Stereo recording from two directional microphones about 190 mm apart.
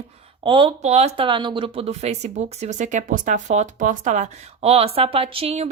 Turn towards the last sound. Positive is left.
turn(degrees=-35)  # may be behind; listen again after turning